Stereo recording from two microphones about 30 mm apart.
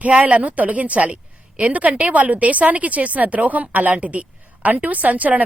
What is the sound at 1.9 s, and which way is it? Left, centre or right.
Speech, right.